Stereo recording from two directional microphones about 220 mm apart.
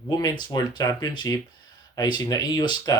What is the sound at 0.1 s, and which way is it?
Speech, 20° left (ahead or behind).